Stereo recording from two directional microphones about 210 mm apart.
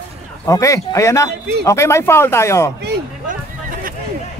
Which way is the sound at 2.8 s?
45° right (ahead or behind).